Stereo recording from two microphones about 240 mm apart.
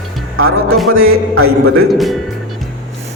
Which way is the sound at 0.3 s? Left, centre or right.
Right.